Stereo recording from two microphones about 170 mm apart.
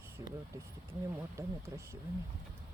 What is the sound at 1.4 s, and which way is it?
Speech, 15° right (ahead or behind).